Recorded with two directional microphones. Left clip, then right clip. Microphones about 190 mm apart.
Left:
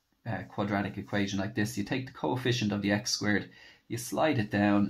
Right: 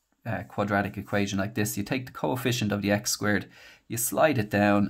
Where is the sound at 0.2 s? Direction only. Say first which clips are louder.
Right 4 dB; 40° right (ahead or behind).